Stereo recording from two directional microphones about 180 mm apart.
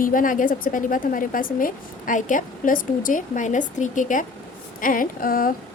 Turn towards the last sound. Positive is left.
turn(degrees=50)  # may be behind; listen again after turning